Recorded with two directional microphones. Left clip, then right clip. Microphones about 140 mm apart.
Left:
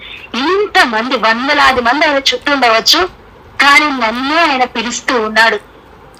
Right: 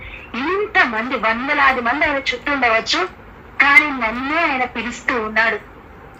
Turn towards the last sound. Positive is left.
turn(degrees=40)  # may be behind; listen again after turning